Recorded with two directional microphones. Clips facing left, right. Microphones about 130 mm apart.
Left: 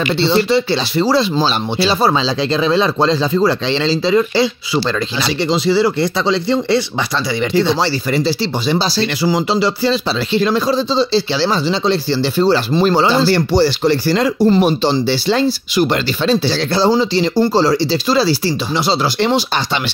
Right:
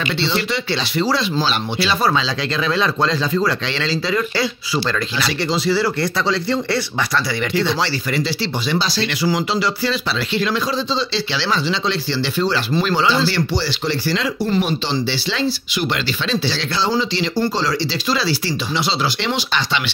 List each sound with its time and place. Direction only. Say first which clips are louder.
0.2 s speech: left 10 dB; 35° left (ahead or behind)
7.5 s speech: left 5 dB; 30° left (ahead or behind)